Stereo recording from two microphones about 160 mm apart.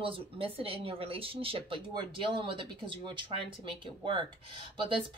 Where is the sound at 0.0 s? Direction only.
35° right (ahead or behind).